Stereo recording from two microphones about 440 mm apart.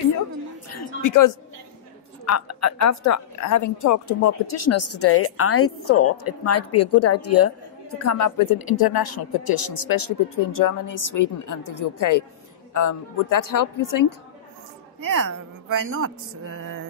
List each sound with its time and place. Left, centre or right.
0.7 s a sound: left
2.2 s a woman's voice: left
15.0 s a woman's voice: right
15.8 s speech: right